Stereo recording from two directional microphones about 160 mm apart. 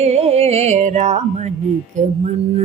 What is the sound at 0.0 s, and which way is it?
Carnatic music, 40° right (ahead or behind).